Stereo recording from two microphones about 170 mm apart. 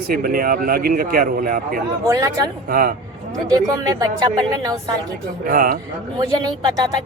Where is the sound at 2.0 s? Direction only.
20° right (ahead or behind).